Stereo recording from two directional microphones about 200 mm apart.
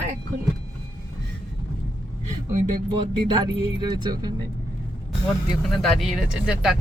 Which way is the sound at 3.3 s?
20° right (ahead or behind).